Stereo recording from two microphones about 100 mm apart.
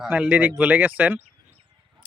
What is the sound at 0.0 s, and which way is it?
Speech, 10° right (ahead or behind).